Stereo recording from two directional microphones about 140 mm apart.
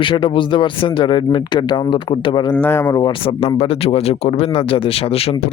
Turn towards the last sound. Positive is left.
turn(degrees=45)  # may be behind; listen again after turning